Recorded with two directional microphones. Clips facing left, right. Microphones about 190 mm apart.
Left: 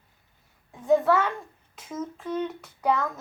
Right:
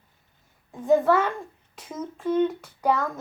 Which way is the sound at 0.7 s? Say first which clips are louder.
Right 1 dB; centre (ahead or behind).